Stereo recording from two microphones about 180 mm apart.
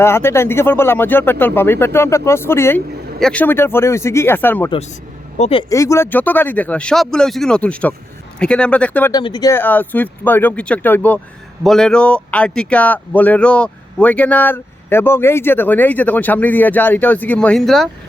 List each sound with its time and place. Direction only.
0.0 s speech: 15° left (ahead or behind)
5.4 s speech: 30° left (ahead or behind)
5.6 s speech: 15° left (ahead or behind)
9.1 s speech: 25° left (ahead or behind); by 17.8 s centre (ahead or behind)